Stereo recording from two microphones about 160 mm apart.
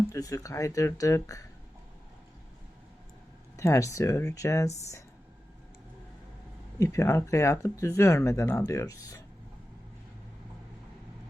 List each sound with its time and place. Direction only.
0.1 s speech: 20° left (ahead or behind)
3.6 s speech: 20° left (ahead or behind)
6.7 s speech: 20° left (ahead or behind)